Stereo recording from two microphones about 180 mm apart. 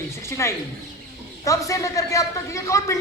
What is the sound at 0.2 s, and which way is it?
A man's voice, 15° left (ahead or behind).